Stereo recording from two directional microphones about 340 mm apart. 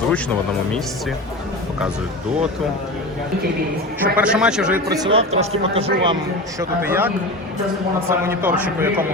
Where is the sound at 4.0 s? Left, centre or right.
Centre.